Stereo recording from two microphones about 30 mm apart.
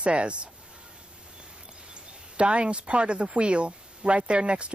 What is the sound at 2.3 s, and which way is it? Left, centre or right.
Speech, right.